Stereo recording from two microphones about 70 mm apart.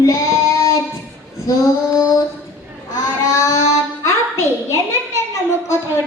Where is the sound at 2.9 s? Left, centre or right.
Left.